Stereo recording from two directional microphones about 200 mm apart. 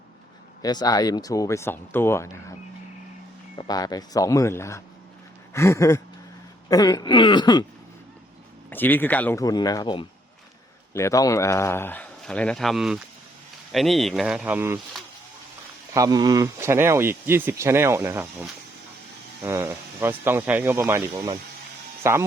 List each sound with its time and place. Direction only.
0.6 s speech: 20° left (ahead or behind)
3.6 s speech: 20° left (ahead or behind)
8.7 s speech: 10° left (ahead or behind); by 14.8 s 10° right (ahead or behind)
15.9 s speech: 15° right (ahead or behind)